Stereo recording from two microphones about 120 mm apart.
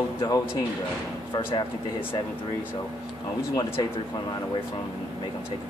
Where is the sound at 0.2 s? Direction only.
30° left (ahead or behind).